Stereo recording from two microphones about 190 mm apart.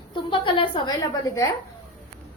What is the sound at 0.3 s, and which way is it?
Speech, 25° left (ahead or behind).